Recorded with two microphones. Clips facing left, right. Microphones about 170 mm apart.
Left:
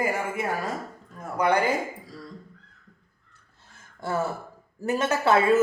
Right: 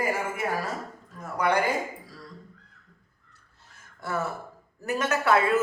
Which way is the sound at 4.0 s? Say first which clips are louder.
Left 3 dB; 30° left (ahead or behind).